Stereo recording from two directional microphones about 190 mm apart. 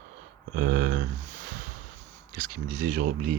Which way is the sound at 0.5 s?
50° right (ahead or behind).